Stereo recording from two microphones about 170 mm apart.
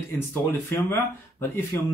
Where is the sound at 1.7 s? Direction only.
15° left (ahead or behind).